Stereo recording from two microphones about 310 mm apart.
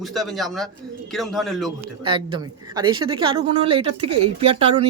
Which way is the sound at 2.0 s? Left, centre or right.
Centre.